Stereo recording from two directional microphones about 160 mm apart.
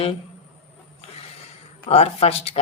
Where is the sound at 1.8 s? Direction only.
40° left (ahead or behind).